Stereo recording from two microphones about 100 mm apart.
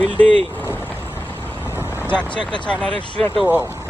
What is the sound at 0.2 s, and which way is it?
Speech, 15° left (ahead or behind).